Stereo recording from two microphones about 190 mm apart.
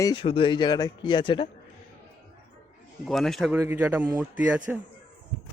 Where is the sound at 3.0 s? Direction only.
Centre (ahead or behind).